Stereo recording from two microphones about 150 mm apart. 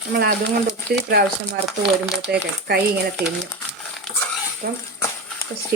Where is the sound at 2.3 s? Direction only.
90° right.